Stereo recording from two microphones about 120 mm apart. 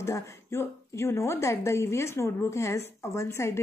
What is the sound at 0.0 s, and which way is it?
A woman's voice, 25° left (ahead or behind).